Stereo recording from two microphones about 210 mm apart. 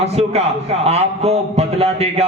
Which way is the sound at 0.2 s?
30° right (ahead or behind).